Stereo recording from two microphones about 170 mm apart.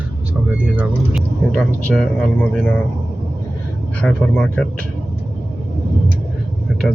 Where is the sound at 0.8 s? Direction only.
Centre (ahead or behind).